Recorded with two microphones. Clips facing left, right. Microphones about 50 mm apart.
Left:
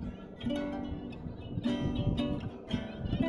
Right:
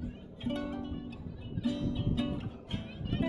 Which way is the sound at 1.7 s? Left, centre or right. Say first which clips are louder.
Left 1 dB; left.